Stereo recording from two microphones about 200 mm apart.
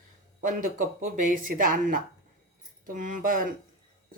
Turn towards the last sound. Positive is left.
turn(degrees=-45)  # may be behind; listen again after turning